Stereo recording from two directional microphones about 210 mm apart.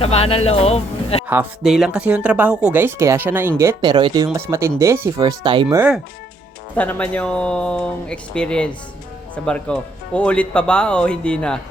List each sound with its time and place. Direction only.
0.0 s speech: 30° left (ahead or behind)
1.3 s speech: 5° right (ahead or behind); by 5.6 s 20° right (ahead or behind)
5.6 s speech: 5° right (ahead or behind)
6.7 s speech: 5° left (ahead or behind)